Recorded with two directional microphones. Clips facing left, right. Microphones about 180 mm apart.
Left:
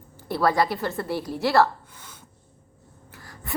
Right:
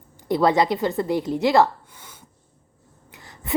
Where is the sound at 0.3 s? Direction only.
20° right (ahead or behind).